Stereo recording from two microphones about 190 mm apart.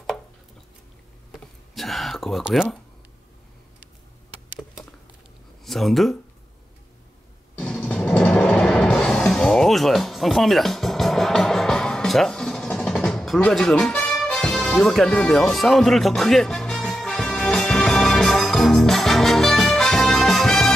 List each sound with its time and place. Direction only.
1.3 s a sound: centre (ahead or behind)
5.7 s speech: centre (ahead or behind)
7.5 s music: 5° left (ahead or behind)